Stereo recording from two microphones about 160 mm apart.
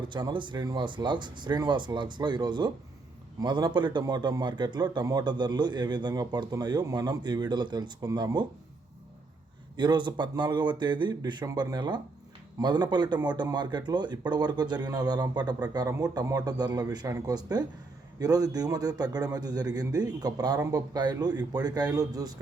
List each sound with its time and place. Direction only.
0.1 s speech: 30° right (ahead or behind)
9.7 s speech: 30° right (ahead or behind)